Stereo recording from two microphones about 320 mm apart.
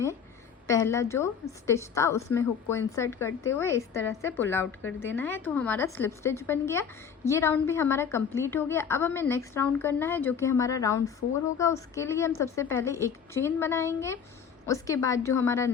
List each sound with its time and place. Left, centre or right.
0.7 s a woman's voice: centre